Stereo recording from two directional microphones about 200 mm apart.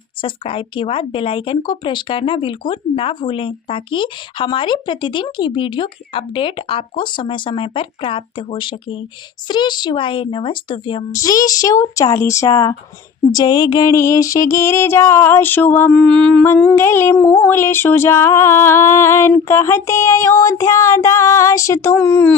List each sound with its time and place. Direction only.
0.2 s speech: 25° left (ahead or behind)
9.5 s music: 20° left (ahead or behind)